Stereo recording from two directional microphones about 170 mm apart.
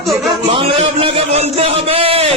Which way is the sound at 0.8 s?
35° right (ahead or behind).